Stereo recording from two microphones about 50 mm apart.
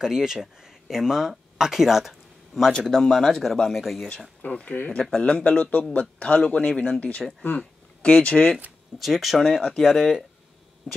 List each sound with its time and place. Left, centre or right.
0.0 s speech: centre
2.9 s speech: centre
3.7 s speech: centre
4.4 s speech: left
5.0 s a man's voice: centre
8.9 s speech: centre
9.4 s speech: centre